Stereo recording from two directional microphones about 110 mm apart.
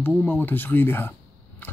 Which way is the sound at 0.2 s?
15° left (ahead or behind).